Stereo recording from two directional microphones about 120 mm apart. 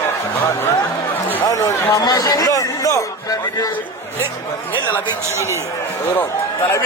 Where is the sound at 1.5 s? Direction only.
30° left (ahead or behind).